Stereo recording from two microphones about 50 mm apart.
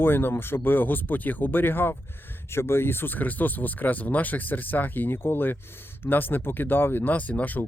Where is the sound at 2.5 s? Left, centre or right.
Left.